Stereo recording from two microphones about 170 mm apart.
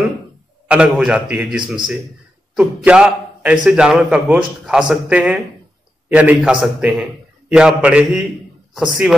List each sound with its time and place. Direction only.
0.7 s a man's voice: 5° right (ahead or behind)